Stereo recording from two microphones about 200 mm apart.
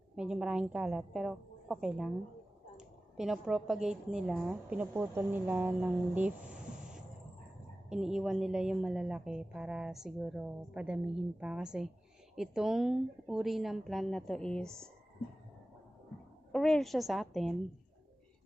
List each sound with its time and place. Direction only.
0.2 s a woman's voice: 5° right (ahead or behind)
16.5 s a woman's voice: centre (ahead or behind)